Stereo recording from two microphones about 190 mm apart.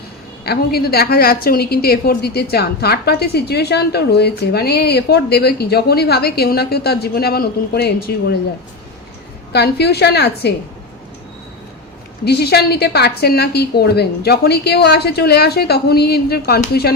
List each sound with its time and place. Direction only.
0.4 s a woman's voice: 55° left (ahead or behind)
9.5 s a woman's voice: 60° left (ahead or behind)
12.2 s a woman's voice: 60° left (ahead or behind)